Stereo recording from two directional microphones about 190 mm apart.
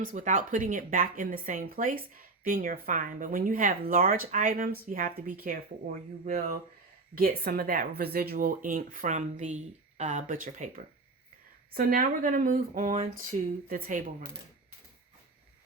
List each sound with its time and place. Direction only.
0.0 s speech: 40° right (ahead or behind)